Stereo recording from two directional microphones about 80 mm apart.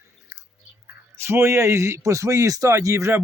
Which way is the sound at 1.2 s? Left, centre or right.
Right.